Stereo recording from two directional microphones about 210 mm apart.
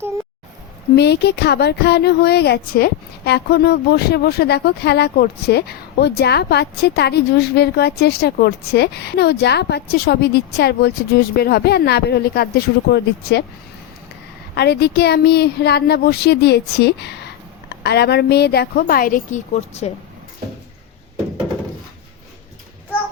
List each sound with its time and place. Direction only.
0.9 s speech: 50° left (ahead or behind)
14.5 s speech: 50° left (ahead or behind); by 19.9 s 35° left (ahead or behind)